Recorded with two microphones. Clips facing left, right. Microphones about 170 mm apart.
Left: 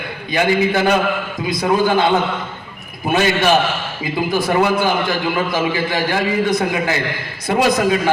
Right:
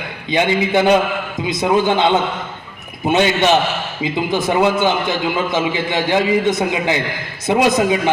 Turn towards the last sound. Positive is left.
turn(degrees=-20)  # may be behind; listen again after turning